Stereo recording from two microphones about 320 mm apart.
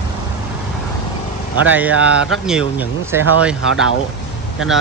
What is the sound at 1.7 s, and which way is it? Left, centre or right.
Speech, centre.